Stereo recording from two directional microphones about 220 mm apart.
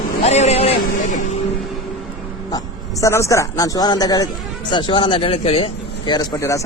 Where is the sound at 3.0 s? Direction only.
15° left (ahead or behind).